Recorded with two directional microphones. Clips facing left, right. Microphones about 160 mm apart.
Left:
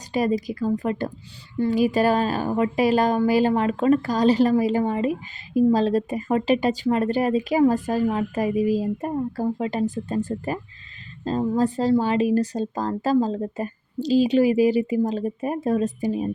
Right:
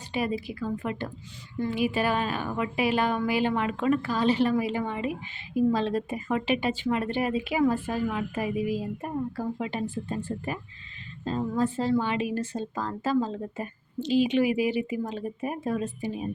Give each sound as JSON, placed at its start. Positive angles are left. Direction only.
{"t": 0.1, "sound": "speech", "side_deg": 40}